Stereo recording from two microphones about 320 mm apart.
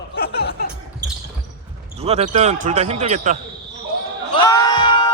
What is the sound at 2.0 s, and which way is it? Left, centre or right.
Speech, centre.